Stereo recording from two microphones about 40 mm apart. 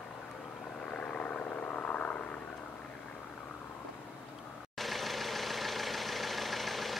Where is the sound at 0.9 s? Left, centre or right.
Left.